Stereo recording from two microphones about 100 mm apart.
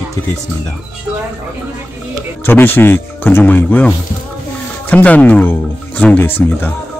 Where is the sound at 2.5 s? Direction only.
20° left (ahead or behind).